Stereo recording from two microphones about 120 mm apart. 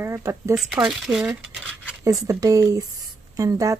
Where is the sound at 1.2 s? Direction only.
10° right (ahead or behind).